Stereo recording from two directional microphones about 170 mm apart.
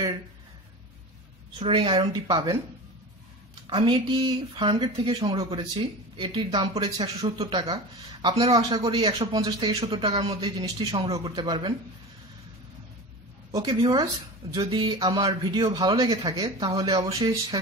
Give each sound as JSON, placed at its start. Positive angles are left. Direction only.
{"t": 1.6, "sound": "speech", "side_deg": -30}
{"t": 3.6, "sound": "speech", "side_deg": -30}
{"t": 13.5, "sound": "speech", "side_deg": -20}